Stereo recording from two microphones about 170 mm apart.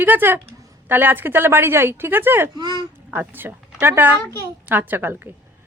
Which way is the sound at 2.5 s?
25° right (ahead or behind).